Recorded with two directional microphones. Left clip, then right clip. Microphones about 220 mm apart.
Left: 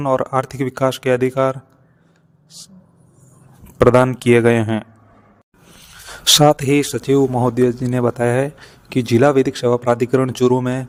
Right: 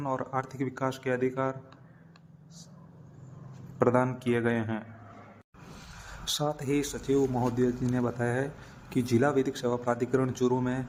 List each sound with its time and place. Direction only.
0.0 s speech: 50° left (ahead or behind)
2.5 s speech: 50° left (ahead or behind)
3.8 s speech: 50° left (ahead or behind)
6.2 s speech: 50° left (ahead or behind)